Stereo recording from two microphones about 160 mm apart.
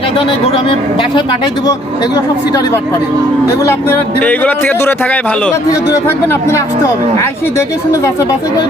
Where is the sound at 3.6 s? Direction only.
10° left (ahead or behind).